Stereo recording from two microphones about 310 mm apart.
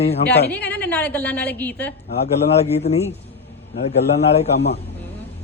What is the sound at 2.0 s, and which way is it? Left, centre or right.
Speech, left.